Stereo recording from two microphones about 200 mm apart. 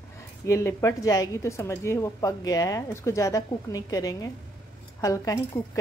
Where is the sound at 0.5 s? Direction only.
15° left (ahead or behind).